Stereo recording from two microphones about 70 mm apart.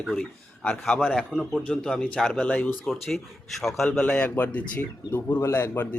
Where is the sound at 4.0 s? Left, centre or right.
Centre.